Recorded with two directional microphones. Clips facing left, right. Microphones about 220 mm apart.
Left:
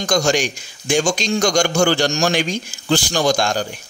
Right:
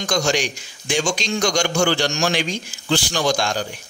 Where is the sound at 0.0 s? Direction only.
45° left (ahead or behind).